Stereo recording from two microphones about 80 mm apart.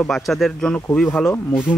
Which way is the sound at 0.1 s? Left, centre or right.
Centre.